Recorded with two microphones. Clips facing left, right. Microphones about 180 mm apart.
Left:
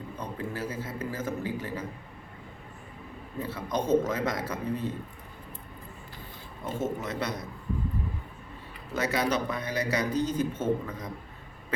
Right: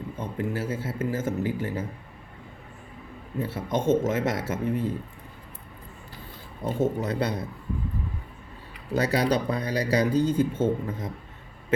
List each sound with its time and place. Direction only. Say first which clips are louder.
0.2 s a man's voice: right 5 dB; 25° right (ahead or behind)
3.3 s a man's voice: right 3 dB; 25° right (ahead or behind)
4.6 s speech: right 5 dB; 90° right
6.7 s a man's voice: right 5 dB; 35° right (ahead or behind)
8.9 s a man's voice: right 4 dB; 35° right (ahead or behind)